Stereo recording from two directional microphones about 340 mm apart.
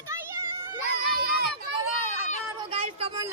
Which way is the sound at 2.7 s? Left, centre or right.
Centre.